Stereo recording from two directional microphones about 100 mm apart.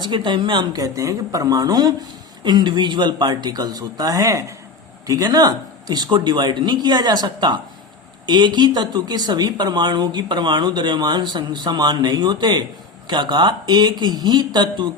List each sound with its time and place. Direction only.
0.0 s speech: 55° right (ahead or behind)